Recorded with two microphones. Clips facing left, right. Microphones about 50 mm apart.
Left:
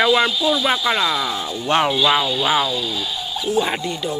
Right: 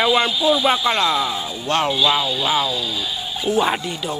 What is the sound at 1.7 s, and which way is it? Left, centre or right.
Speech, left.